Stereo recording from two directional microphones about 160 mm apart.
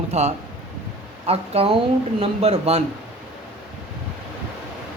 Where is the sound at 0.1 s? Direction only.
45° right (ahead or behind).